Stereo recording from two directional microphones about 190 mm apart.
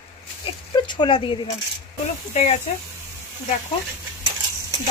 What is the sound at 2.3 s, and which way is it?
Speech, 35° left (ahead or behind).